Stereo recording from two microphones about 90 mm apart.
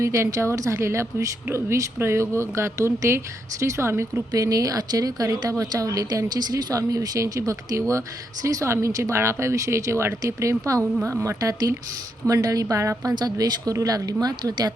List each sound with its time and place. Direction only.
0.0 s a woman's voice: 35° right (ahead or behind)
4.3 s a woman's voice: 40° right (ahead or behind)
13.1 s speech: 45° right (ahead or behind)